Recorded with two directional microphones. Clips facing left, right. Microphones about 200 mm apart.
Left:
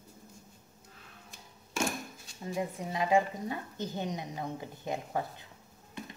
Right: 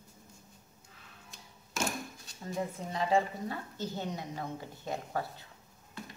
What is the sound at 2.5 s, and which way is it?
A woman's voice, 15° left (ahead or behind).